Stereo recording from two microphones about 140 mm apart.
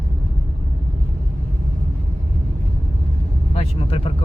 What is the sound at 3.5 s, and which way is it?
Vehicle, 45° left (ahead or behind).